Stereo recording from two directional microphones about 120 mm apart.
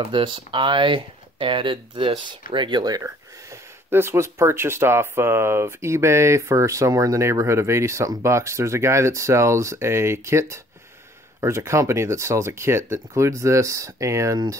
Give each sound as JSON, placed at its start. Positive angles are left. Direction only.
{"t": 0.0, "sound": "speech", "side_deg": -40}